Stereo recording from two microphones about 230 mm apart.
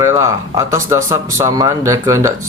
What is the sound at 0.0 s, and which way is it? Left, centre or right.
Speech, centre.